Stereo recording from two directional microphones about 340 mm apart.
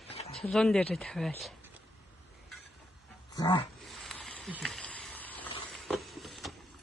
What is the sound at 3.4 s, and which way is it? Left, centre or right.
Speech, centre.